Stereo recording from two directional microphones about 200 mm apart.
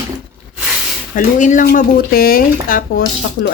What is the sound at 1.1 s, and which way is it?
Speech, 40° left (ahead or behind).